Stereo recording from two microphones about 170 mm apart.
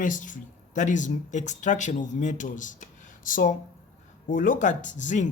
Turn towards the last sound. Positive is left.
turn(degrees=45)  # may be behind; listen again after turning